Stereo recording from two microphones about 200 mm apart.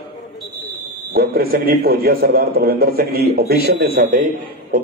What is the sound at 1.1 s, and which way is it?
A man's voice, 50° right (ahead or behind).